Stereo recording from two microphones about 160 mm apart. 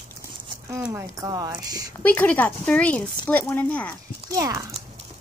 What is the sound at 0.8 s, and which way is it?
Speech, 15° right (ahead or behind).